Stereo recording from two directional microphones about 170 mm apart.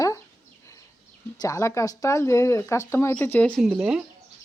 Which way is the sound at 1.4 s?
20° left (ahead or behind).